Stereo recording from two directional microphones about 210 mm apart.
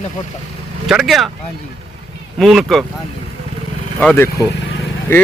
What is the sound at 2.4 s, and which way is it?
Speech, centre (ahead or behind).